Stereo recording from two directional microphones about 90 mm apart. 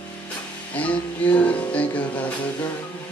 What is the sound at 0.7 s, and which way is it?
Music, 15° left (ahead or behind).